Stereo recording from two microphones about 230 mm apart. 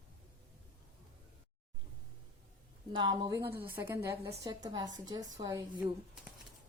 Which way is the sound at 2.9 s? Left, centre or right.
Centre.